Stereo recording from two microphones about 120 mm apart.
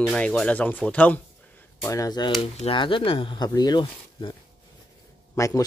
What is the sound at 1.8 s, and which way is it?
Speech, 30° left (ahead or behind).